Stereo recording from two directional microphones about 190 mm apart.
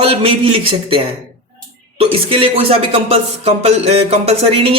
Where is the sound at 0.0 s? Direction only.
30° right (ahead or behind).